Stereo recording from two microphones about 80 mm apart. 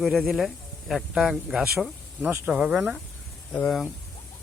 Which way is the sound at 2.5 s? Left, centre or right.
Centre.